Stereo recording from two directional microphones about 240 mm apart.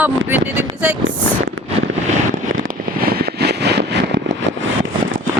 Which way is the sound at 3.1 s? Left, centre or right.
Right.